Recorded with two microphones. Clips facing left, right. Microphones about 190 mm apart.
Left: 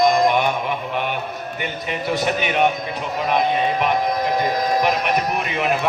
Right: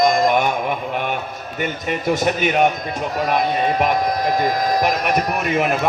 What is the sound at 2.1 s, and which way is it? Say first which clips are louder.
Speech: right 3 dB; 45° right (ahead or behind).